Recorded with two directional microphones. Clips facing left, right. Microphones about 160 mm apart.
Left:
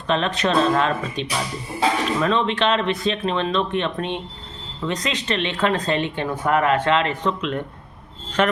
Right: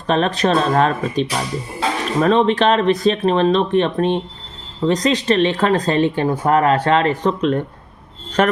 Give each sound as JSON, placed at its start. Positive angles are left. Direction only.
{"t": 0.1, "sound": "speech", "side_deg": -40}